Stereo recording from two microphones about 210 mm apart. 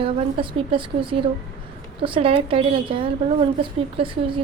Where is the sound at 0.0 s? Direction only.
25° right (ahead or behind).